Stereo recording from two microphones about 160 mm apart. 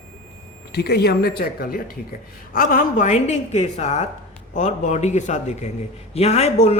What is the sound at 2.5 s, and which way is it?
Speech, 50° left (ahead or behind).